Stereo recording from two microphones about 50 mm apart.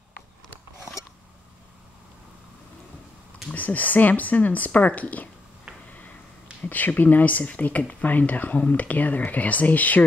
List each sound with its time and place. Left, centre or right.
3.5 s speech: left
5.7 s a sound: right
6.6 s speech: left